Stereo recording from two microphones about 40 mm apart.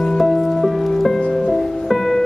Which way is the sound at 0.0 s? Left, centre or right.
Centre.